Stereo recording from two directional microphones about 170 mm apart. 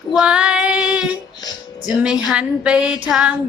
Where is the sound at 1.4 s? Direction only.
25° left (ahead or behind).